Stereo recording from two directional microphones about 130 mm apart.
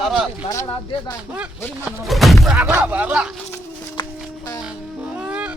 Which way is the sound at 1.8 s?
Centre (ahead or behind).